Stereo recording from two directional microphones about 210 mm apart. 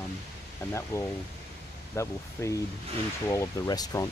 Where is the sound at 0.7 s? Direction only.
15° left (ahead or behind).